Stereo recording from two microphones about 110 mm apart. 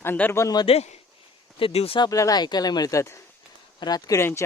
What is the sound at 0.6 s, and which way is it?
Speech, 65° left (ahead or behind).